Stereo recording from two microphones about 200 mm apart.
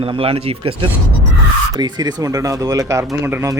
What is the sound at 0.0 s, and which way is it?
Speech, 30° right (ahead or behind).